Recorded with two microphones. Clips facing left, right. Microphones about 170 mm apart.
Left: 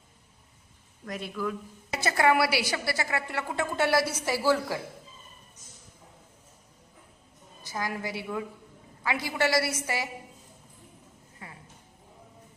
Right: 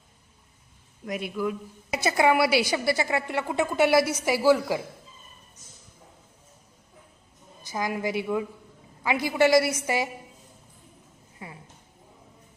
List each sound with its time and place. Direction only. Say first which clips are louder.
1.0 s a woman's voice: right 4 dB; 15° right (ahead or behind)
7.7 s a woman's voice: right 5 dB; 15° right (ahead or behind)